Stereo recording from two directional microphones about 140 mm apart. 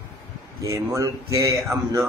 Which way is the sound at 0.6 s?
25° right (ahead or behind).